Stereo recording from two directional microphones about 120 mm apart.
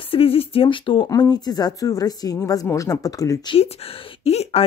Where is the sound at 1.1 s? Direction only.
35° left (ahead or behind).